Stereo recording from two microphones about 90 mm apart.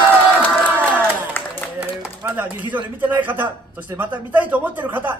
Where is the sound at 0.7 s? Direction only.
20° right (ahead or behind).